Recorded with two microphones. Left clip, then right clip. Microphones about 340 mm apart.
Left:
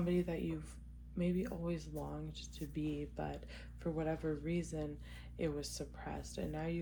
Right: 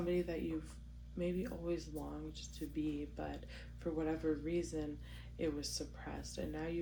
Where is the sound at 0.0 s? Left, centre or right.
Left.